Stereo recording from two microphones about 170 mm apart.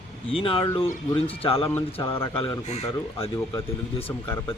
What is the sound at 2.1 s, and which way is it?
Speech, 15° left (ahead or behind).